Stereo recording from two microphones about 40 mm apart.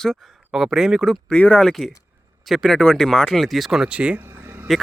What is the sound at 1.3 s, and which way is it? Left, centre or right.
Speech, left.